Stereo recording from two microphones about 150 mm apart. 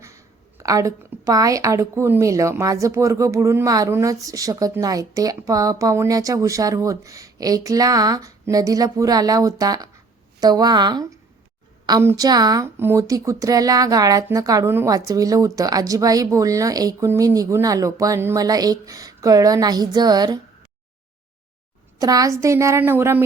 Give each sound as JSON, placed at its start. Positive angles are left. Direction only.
{"t": 0.0, "sound": "a woman's voice", "side_deg": -20}
{"t": 21.9, "sound": "a woman's voice", "side_deg": -25}